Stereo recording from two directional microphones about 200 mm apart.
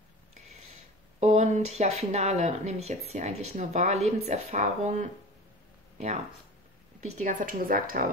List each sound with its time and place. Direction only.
1.2 s speech: 35° right (ahead or behind)
7.0 s a woman's voice: 40° right (ahead or behind)